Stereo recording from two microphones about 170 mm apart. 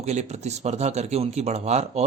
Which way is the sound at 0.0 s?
40° right (ahead or behind).